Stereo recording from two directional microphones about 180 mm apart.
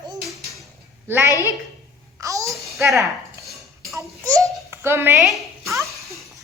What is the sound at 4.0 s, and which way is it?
Babbling, 20° right (ahead or behind).